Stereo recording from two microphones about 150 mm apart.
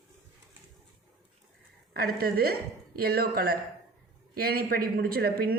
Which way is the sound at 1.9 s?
85° right.